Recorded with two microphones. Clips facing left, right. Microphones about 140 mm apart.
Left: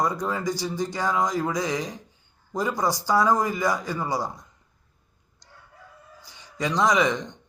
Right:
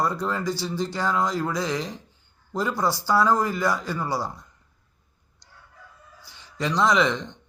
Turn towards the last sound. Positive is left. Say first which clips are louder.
# even
turn(degrees=15)  # may be behind; listen again after turning